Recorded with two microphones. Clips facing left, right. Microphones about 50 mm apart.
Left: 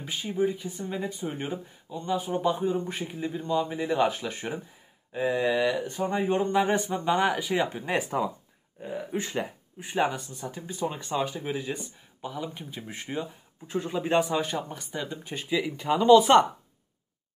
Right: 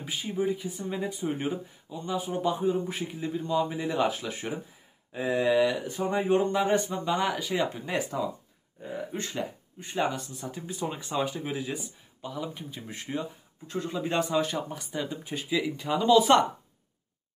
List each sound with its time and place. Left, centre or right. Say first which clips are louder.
0.0 s speech: left 2 dB; centre
4.3 s speech: even; centre
6.5 s speech: left 1 dB; centre
7.7 s speech: left 3 dB; left; by 11.9 s centre
12.2 s speech: left 1 dB; centre